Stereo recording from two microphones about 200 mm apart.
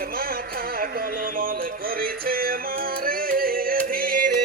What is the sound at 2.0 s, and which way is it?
Music, 45° right (ahead or behind).